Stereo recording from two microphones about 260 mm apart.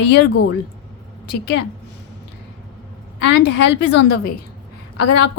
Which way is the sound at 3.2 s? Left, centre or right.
Left.